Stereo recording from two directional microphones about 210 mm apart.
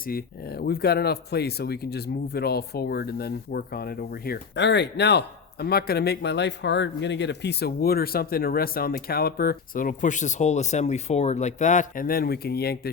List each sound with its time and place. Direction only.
0.0 s speech: 45° left (ahead or behind)